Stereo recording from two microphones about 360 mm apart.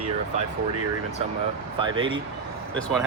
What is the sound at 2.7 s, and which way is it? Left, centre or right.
Speech, centre.